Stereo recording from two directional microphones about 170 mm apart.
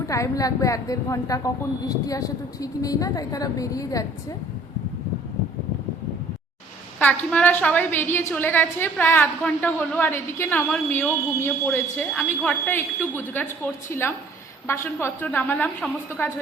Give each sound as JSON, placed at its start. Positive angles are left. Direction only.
{"t": 0.1, "sound": "a woman's voice", "side_deg": 20}
{"t": 7.0, "sound": "a woman's voice", "side_deg": 10}